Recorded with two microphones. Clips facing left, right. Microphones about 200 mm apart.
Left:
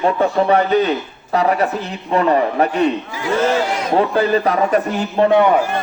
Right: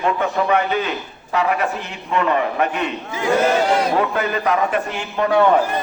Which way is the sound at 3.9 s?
30° left (ahead or behind).